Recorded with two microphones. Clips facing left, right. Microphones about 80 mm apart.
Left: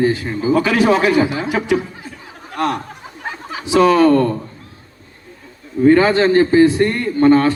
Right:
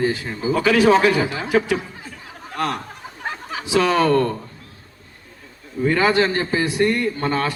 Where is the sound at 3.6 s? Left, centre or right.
Left.